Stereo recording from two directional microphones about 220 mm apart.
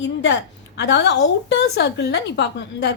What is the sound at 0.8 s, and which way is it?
A woman's voice, 50° left (ahead or behind).